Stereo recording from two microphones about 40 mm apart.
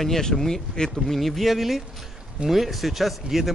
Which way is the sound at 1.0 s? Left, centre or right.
Centre.